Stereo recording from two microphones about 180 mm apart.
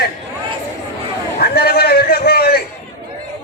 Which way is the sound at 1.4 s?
60° left (ahead or behind).